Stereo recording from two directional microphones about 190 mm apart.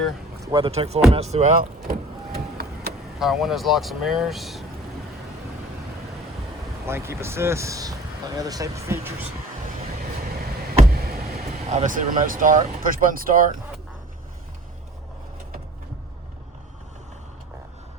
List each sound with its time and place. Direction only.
0.4 s speech: 25° right (ahead or behind)
2.3 s vehicle: 55° right (ahead or behind)
3.2 s speech: centre (ahead or behind)
6.8 s speech: 15° right (ahead or behind)
11.6 s speech: 35° right (ahead or behind)